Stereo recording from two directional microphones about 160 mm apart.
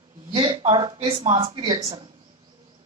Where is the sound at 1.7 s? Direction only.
25° right (ahead or behind).